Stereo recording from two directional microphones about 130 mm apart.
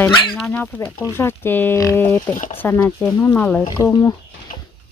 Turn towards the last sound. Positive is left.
turn(degrees=25)  # may be behind; listen again after turning